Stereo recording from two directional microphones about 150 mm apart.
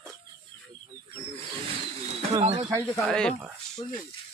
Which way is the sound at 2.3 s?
45° right (ahead or behind).